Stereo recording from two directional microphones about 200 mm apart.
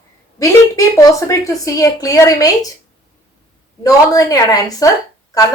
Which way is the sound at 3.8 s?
15° left (ahead or behind).